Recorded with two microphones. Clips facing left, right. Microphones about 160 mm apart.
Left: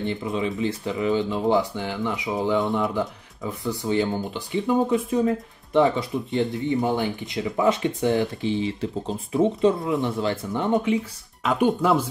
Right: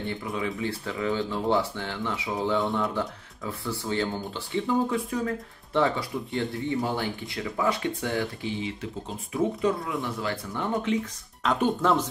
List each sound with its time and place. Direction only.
0.0 s speech: 20° left (ahead or behind)